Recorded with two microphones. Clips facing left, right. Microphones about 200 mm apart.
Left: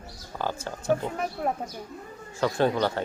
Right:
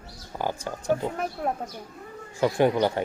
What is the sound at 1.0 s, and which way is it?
Speech, centre (ahead or behind).